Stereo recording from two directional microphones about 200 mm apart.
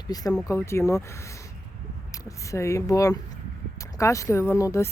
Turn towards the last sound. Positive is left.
turn(degrees=15)  # may be behind; listen again after turning